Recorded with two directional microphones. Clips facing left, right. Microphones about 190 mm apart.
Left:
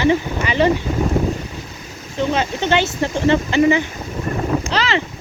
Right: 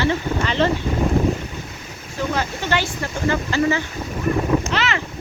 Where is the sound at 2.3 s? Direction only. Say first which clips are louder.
Left 5 dB; 20° left (ahead or behind).